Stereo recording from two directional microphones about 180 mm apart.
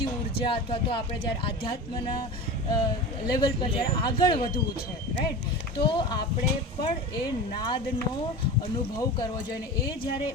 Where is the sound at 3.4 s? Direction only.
25° left (ahead or behind).